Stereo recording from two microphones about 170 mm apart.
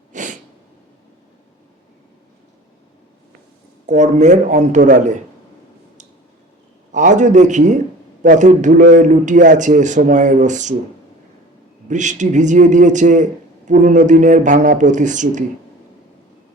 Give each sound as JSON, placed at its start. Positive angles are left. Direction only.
{"t": 0.1, "sound": "sneeze", "side_deg": -45}
{"t": 3.8, "sound": "a man's voice", "side_deg": -45}
{"t": 6.9, "sound": "a man's voice", "side_deg": -45}
{"t": 11.9, "sound": "a man's voice", "side_deg": -45}